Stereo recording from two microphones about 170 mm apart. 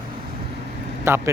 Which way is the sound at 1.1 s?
15° right (ahead or behind).